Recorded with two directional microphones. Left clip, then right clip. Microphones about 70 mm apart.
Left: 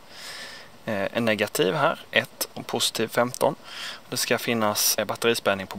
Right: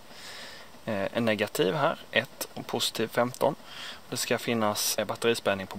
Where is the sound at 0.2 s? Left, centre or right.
Left.